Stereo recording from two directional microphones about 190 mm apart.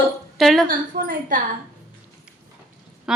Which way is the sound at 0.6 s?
45° right (ahead or behind).